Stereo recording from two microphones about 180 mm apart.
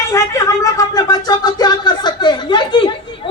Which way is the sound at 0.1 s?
20° left (ahead or behind).